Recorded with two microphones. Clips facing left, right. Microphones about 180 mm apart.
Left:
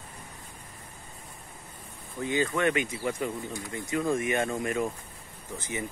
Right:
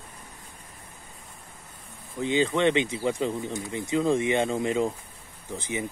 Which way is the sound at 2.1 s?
20° right (ahead or behind).